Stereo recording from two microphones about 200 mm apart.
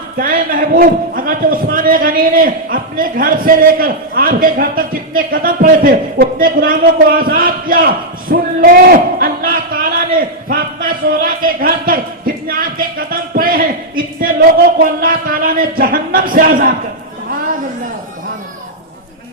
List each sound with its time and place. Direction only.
0.2 s a man's voice: 45° right (ahead or behind)